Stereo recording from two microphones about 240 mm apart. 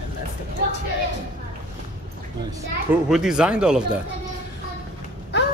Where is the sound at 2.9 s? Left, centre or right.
Centre.